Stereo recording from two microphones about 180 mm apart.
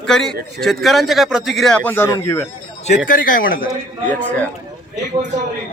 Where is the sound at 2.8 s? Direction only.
50° left (ahead or behind).